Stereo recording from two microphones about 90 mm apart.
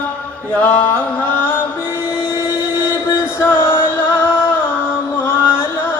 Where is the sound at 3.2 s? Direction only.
25° left (ahead or behind).